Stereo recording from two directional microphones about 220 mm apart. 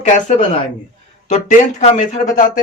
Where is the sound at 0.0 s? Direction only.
35° left (ahead or behind).